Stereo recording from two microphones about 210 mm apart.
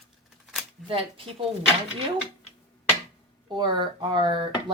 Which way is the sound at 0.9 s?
25° right (ahead or behind).